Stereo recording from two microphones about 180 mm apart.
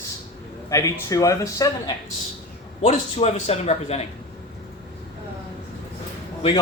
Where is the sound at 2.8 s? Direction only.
35° left (ahead or behind).